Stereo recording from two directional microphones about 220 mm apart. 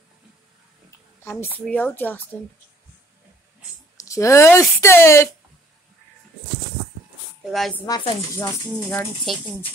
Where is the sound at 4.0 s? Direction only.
15° left (ahead or behind).